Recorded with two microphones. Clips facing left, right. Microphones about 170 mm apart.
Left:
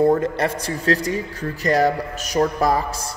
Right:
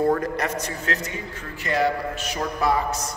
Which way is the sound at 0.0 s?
25° left (ahead or behind).